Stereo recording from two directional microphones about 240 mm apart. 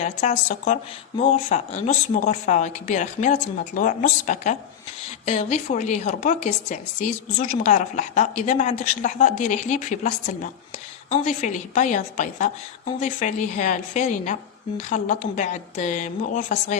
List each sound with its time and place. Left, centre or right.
0.0 s a woman's voice: left